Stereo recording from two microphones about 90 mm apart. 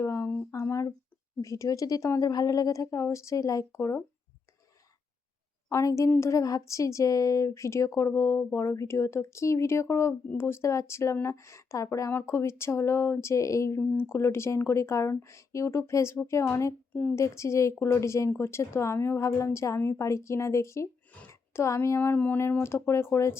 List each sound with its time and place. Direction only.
0.0 s a sound: 30° left (ahead or behind)
1.4 s speech: 35° left (ahead or behind)
5.6 s a woman's voice: 35° left (ahead or behind)
16.9 s speech: 20° left (ahead or behind)
17.2 s speech: 30° left (ahead or behind)
21.1 s a sound: 25° left (ahead or behind)
21.8 s speech: 30° left (ahead or behind)
22.1 s speech: 20° left (ahead or behind)
22.4 s speech: 30° left (ahead or behind)